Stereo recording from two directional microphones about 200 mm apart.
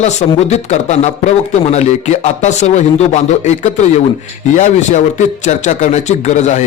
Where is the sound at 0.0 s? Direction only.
35° left (ahead or behind).